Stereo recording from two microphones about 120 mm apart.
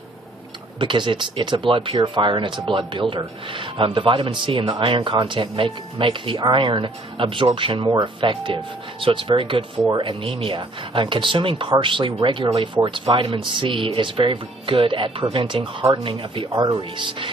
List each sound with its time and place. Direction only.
0.7 s a man's voice: 40° right (ahead or behind)